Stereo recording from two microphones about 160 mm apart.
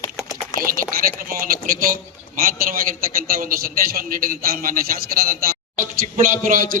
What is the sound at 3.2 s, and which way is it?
A man's voice, 65° right (ahead or behind).